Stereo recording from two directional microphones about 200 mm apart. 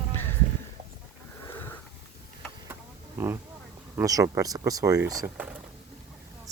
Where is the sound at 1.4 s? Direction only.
10° left (ahead or behind).